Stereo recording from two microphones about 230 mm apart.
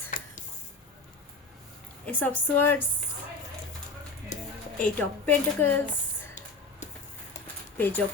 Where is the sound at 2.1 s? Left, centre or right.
Centre.